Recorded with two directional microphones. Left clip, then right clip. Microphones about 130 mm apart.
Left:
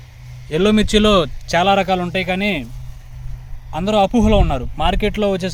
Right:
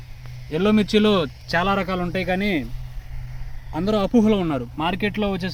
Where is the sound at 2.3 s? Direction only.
90° left.